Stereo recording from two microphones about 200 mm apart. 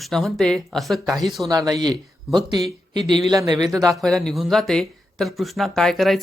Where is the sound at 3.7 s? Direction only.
Centre (ahead or behind).